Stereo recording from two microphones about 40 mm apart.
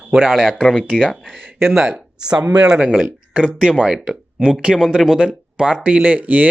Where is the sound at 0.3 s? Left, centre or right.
Centre.